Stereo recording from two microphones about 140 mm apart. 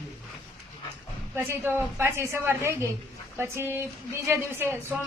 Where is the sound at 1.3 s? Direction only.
15° right (ahead or behind).